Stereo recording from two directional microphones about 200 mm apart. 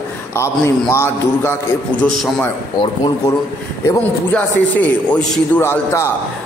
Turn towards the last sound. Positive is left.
turn(degrees=15)  # may be behind; listen again after turning